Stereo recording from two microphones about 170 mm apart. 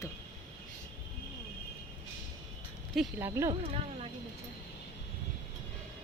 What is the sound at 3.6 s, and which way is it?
Speech, 35° right (ahead or behind).